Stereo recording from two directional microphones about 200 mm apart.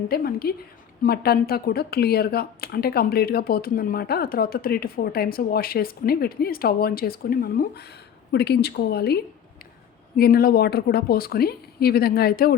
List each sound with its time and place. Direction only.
0.1 s a woman's voice: 50° left (ahead or behind)